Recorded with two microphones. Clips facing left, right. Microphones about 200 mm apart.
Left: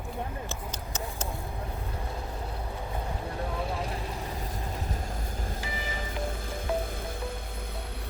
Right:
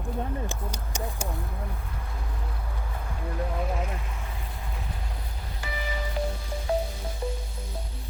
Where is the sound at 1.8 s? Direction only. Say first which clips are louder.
Left 4 dB; 25° left (ahead or behind); by 5.6 s 45° left (ahead or behind).